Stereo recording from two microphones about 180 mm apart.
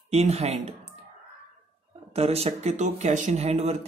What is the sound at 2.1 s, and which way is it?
Speech, 35° right (ahead or behind).